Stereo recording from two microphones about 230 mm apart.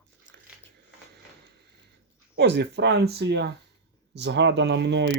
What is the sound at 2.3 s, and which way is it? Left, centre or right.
Speech, right.